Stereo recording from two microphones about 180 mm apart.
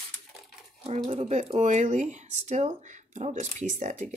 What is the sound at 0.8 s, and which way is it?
Speech, 35° right (ahead or behind).